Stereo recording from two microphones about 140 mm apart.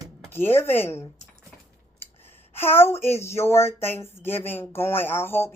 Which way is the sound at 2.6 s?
15° left (ahead or behind).